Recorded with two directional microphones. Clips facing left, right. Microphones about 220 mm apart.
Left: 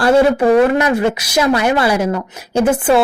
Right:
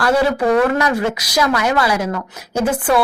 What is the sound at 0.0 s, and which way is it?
Speech, 25° left (ahead or behind).